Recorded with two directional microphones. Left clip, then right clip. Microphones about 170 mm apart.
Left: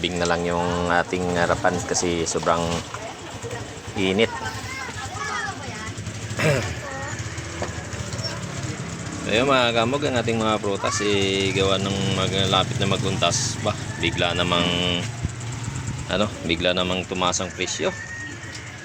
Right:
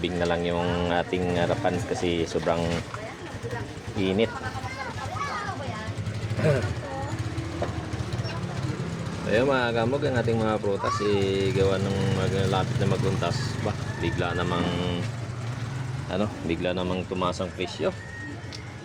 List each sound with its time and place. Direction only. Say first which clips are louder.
0.0 s speech: left 3 dB; centre (ahead or behind)
4.0 s speech: left 4 dB; 5° left (ahead or behind)
6.4 s speech: left 3 dB; 20° left (ahead or behind)
9.3 s speech: left 4 dB; 20° left (ahead or behind)
16.0 s speech: left 5 dB; 5° left (ahead or behind)